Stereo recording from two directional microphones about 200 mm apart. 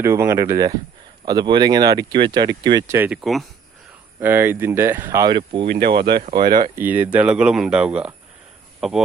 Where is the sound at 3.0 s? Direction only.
Centre (ahead or behind); by 5.6 s 25° right (ahead or behind).